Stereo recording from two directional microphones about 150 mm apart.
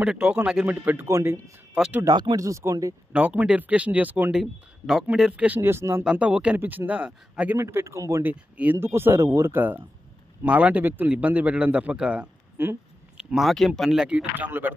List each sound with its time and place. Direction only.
0.0 s speech: 5° right (ahead or behind)
2.0 s speech: 25° right (ahead or behind)
3.1 s speech: 10° right (ahead or behind)
7.5 s speech: 20° right (ahead or behind)